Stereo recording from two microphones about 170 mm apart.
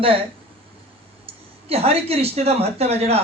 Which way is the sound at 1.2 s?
35° right (ahead or behind).